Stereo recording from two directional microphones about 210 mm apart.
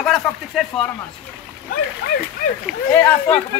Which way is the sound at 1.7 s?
45° left (ahead or behind).